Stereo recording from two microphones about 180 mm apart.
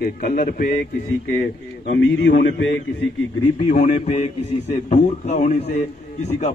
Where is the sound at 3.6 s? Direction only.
40° left (ahead or behind).